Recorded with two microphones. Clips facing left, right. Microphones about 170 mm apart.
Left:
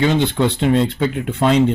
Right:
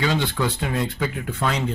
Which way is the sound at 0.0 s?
20° left (ahead or behind).